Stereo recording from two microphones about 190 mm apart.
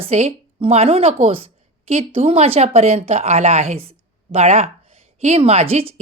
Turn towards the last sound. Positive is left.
turn(degrees=-30)  # may be behind; listen again after turning